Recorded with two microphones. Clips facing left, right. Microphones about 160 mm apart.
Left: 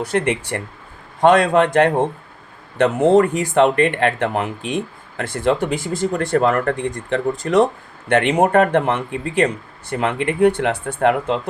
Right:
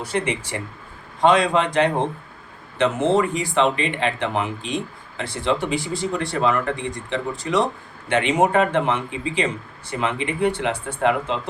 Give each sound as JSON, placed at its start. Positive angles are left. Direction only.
{"t": 0.1, "sound": "speech", "side_deg": 55}